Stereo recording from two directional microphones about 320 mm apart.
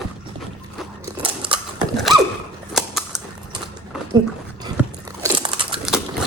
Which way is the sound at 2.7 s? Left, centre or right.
Centre.